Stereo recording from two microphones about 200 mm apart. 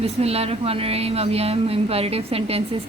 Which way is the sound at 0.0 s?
30° right (ahead or behind).